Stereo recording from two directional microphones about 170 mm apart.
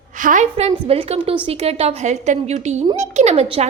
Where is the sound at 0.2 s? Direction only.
50° right (ahead or behind).